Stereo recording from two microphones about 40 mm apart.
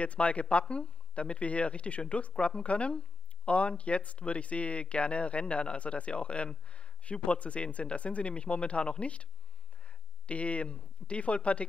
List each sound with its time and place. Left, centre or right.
0.0 s speech: left